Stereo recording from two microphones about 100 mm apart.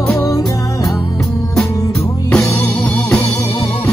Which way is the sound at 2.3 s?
5° left (ahead or behind).